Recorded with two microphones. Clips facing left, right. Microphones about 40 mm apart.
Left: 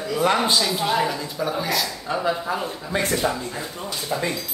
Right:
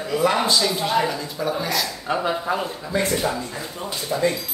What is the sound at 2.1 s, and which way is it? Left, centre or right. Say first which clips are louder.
Speech: right 1 dB; centre.